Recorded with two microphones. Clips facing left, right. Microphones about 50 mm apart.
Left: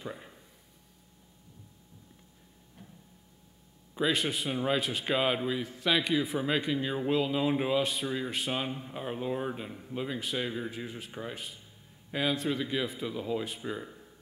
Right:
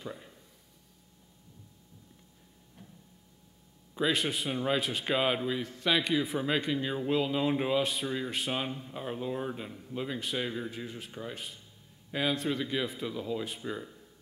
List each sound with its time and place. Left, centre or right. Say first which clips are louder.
0.0 s a sound: left 1 dB; left
4.0 s speech: even; centre
8.7 s speech: left 1 dB; centre
9.9 s speech: even; centre
10.5 s speech: left 1 dB; centre
11.3 s speech: even; centre
13.1 s speech: left 1 dB; centre
13.8 s a sound: left 3 dB; left